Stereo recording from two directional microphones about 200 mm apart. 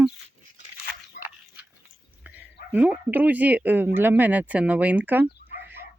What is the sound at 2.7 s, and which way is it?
Speech, 10° right (ahead or behind).